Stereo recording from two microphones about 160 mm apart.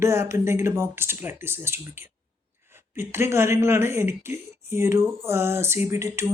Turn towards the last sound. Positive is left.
turn(degrees=-15)  # may be behind; listen again after turning